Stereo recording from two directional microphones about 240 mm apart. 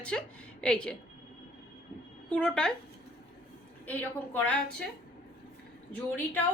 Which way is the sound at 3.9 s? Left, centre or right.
Centre.